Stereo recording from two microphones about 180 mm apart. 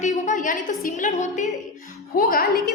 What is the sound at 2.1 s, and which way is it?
Speech, 55° left (ahead or behind).